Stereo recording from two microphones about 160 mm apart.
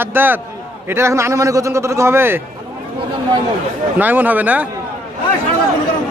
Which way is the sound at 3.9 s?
10° right (ahead or behind).